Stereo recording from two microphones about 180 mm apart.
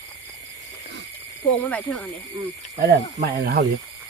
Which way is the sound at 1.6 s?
5° left (ahead or behind).